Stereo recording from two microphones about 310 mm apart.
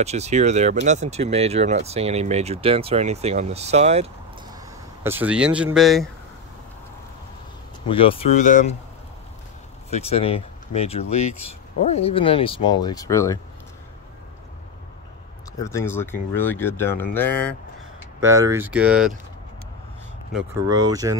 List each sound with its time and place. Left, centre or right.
0.0 s speech: right
5.0 s speech: centre
7.9 s speech: centre
9.8 s speech: centre
15.6 s speech: centre
18.2 s speech: centre
20.3 s speech: centre